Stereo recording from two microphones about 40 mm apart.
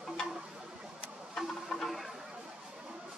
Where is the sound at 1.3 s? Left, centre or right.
Centre.